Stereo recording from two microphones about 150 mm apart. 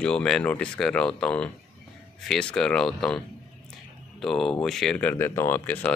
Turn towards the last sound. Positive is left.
turn(degrees=10)  # may be behind; listen again after turning